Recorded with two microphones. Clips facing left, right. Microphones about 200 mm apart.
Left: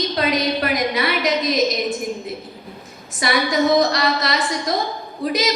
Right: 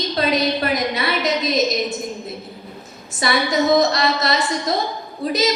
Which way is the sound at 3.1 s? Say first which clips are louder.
Even; 25° right (ahead or behind).